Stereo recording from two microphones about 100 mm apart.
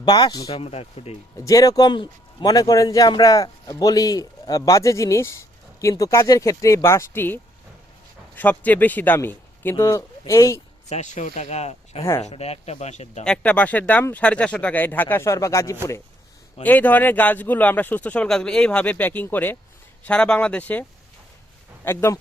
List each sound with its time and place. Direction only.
0.0 s speech: 45° left (ahead or behind)
0.5 s speech: 80° left
1.5 s a man's voice: 35° left (ahead or behind)
8.4 s speech: 15° left (ahead or behind)
10.9 s speech: 90° left
12.0 s speech: 30° left (ahead or behind)
12.3 s speech: 90° left
13.2 s speech: 10° left (ahead or behind); by 16.0 s 30° left (ahead or behind)
16.6 s speech: 20° left (ahead or behind)
21.8 s speech: 25° left (ahead or behind)